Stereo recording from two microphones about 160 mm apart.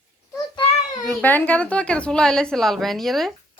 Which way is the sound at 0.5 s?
35° left (ahead or behind).